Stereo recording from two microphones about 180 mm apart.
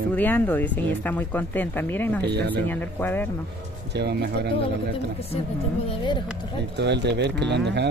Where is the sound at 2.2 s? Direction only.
70° right (ahead or behind).